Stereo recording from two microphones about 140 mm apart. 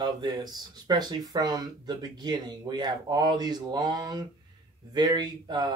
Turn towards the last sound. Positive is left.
turn(degrees=-30)  # may be behind; listen again after turning